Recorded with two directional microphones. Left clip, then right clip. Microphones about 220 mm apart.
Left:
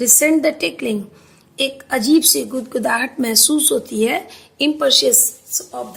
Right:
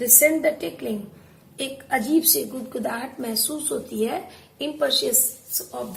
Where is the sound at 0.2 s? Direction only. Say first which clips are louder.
Left 4 dB; 50° left (ahead or behind).